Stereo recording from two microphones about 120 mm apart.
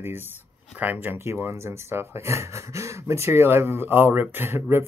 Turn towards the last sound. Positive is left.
turn(degrees=-20)  # may be behind; listen again after turning